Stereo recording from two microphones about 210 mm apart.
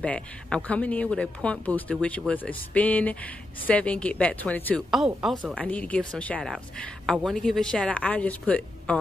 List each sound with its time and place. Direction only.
0.0 s a woman's voice: 5° left (ahead or behind)